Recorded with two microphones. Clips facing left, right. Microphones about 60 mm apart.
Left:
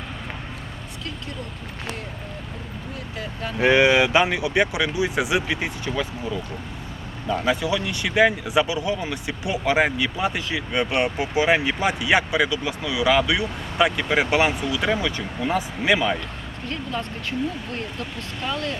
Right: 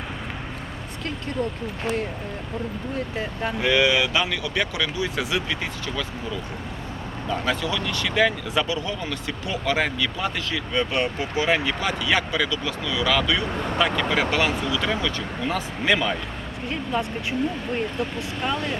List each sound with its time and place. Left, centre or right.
3.6 s speech: left
7.3 s speech: centre
16.6 s speech: centre
18.4 s speech: centre